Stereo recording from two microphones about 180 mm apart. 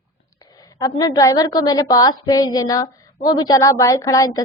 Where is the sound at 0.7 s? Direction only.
20° left (ahead or behind).